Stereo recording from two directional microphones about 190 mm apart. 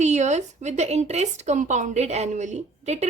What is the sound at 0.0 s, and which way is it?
Speech, 40° right (ahead or behind).